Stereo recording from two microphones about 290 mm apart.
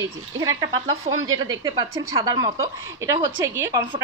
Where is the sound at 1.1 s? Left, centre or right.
Right.